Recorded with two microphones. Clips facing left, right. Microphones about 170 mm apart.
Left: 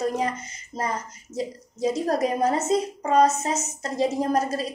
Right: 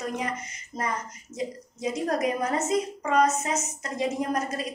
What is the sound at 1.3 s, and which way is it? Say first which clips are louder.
A woman's voice: left 3 dB; 30° left (ahead or behind).